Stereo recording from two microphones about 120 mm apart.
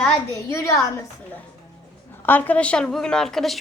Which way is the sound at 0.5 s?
25° left (ahead or behind).